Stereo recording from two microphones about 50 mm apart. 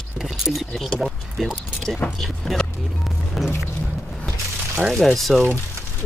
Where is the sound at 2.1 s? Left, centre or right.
Centre.